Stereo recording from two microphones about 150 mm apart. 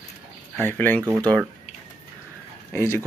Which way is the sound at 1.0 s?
10° right (ahead or behind).